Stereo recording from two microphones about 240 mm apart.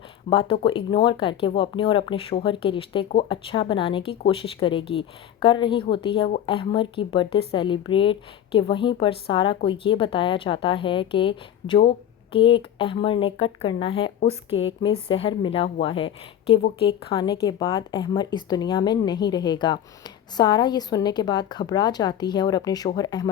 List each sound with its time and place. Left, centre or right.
0.3 s a woman's voice: left